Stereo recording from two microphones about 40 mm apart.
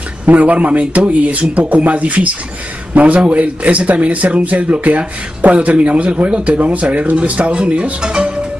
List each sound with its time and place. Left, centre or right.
0.3 s speech: right